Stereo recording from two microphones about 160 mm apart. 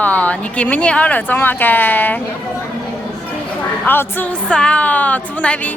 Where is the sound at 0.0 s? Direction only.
10° left (ahead or behind).